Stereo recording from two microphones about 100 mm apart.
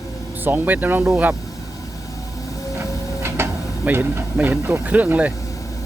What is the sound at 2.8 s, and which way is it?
Vehicle, 25° right (ahead or behind).